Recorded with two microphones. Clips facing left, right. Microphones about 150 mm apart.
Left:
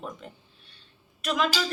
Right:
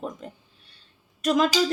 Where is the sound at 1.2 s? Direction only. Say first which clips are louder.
Right 5 dB; 40° right (ahead or behind).